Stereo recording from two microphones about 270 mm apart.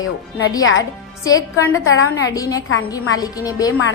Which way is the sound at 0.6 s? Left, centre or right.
Left.